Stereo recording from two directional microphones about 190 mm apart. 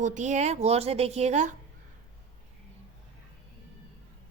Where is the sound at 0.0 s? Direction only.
40° right (ahead or behind).